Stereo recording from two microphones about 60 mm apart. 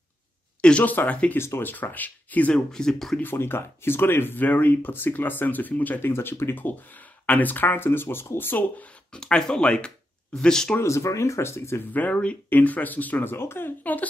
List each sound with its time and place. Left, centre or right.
0.6 s speech: centre
1.3 s speech: left
2.5 s speech: centre
3.2 s speech: left
9.1 s speech: centre
10.8 s speech: left
11.9 s speech: left